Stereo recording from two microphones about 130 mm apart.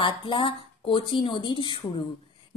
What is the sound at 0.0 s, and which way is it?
A woman's voice, 40° left (ahead or behind).